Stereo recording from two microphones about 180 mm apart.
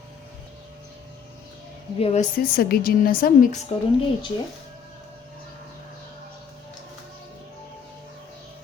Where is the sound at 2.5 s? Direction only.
55° left (ahead or behind).